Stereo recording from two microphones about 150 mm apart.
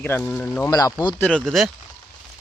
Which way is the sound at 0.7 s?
25° left (ahead or behind).